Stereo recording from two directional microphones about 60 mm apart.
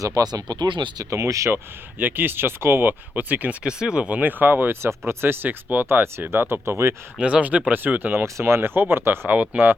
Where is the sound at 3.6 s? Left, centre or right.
Centre; by 6.9 s right.